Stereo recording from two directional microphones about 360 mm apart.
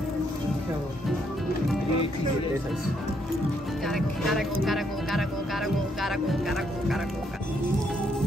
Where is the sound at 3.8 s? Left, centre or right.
Centre.